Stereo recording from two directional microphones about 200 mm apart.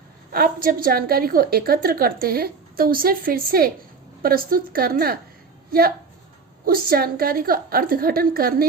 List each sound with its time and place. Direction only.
0.3 s a woman's voice: 45° right (ahead or behind)
6.7 s a woman's voice: 45° right (ahead or behind)